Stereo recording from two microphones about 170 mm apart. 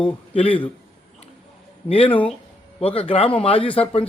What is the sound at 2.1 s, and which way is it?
Speech, 10° left (ahead or behind).